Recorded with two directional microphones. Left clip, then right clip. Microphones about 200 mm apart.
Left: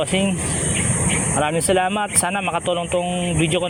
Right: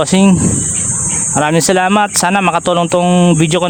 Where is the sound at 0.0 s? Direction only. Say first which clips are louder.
Right 8 dB; 50° right (ahead or behind).